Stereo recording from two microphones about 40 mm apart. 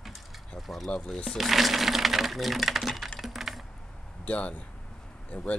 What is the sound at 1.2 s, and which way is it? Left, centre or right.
Speech, centre.